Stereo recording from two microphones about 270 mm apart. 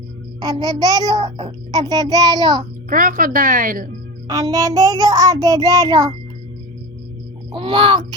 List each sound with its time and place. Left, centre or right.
0.3 s a child's voice: centre
2.9 s speech: right
4.3 s a child's voice: centre
7.5 s a child's voice: centre